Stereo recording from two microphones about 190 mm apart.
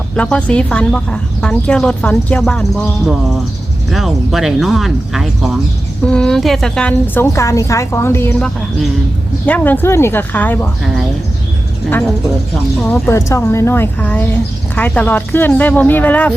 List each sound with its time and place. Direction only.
0.2 s a woman's voice: 5° left (ahead or behind)
12.8 s a woman's voice: 10° left (ahead or behind)